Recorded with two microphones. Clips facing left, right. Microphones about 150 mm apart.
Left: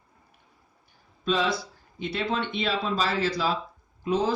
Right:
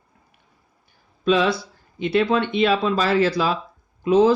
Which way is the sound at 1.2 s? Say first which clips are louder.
Right 7 dB; 75° right (ahead or behind).